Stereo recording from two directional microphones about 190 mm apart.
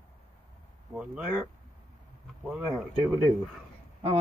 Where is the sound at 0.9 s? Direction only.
5° right (ahead or behind).